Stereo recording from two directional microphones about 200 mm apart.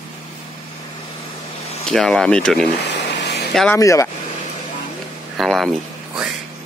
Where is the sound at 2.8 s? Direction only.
60° left (ahead or behind).